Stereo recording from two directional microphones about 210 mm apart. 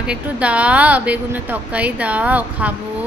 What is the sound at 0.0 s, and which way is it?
A woman's voice, 5° right (ahead or behind).